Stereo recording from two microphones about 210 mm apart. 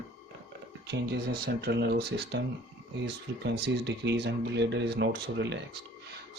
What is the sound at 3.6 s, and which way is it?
Speech, 55° right (ahead or behind).